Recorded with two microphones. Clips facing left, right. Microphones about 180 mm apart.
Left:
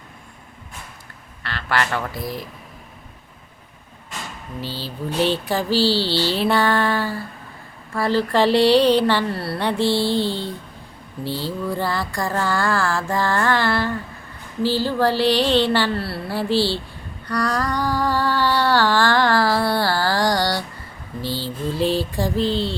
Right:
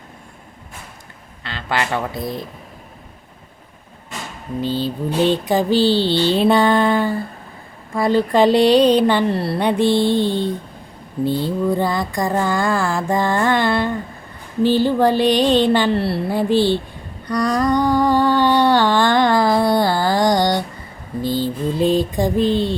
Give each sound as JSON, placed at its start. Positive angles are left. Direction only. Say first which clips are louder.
{"t": 1.5, "sound": "mantra", "louder": "right 1 dB", "side_deg": -20}
{"t": 4.8, "sound": "mantra", "louder": "right 2 dB", "side_deg": -20}
{"t": 11.2, "sound": "speech", "louder": "right 8 dB", "side_deg": -50}
{"t": 11.4, "sound": "mantra", "louder": "right 5 dB", "side_deg": -20}
{"t": 17.2, "sound": "a sound", "louder": "right 5 dB", "side_deg": -20}
{"t": 21.2, "sound": "speech", "louder": "right 7 dB", "side_deg": -50}
{"t": 21.8, "sound": "mantra", "louder": "right 4 dB", "side_deg": -20}